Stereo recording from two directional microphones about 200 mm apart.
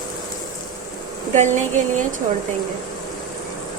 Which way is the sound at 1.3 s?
35° right (ahead or behind).